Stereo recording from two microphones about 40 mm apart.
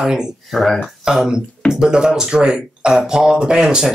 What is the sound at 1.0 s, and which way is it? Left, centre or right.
Speech, centre.